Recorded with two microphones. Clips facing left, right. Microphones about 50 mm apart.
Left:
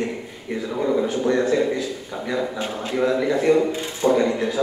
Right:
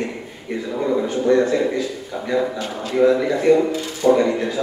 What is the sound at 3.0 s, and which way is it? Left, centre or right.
A man's voice, centre.